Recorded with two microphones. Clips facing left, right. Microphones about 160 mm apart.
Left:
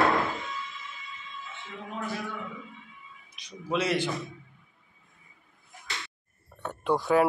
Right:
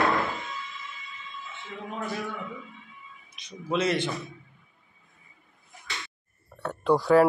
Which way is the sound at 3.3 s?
10° left (ahead or behind).